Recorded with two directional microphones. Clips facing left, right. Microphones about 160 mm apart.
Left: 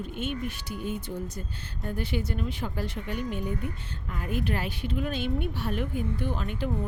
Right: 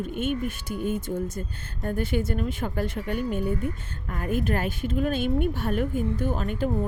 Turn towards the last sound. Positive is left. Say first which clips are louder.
# right 4 dB
turn(degrees=-45)  # may be behind; listen again after turning